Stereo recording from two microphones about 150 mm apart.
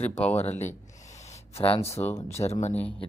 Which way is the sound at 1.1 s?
50° left (ahead or behind).